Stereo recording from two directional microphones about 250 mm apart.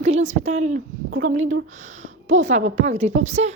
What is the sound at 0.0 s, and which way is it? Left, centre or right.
A woman's voice, right.